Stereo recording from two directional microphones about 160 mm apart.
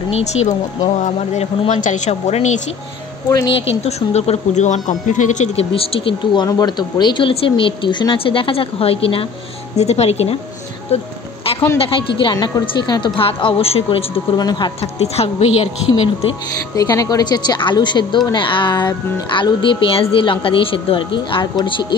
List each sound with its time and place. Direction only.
0.1 s a woman's voice: 45° left (ahead or behind)
3.3 s a woman's voice: 20° left (ahead or behind)
3.6 s speech: 40° left (ahead or behind)
12.2 s speech: 25° left (ahead or behind)
14.8 s speech: 40° left (ahead or behind)
16.7 s a woman's voice: 20° left (ahead or behind)